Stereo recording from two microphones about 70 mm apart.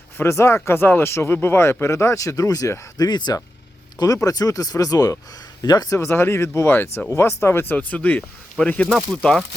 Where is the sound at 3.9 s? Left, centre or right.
Left.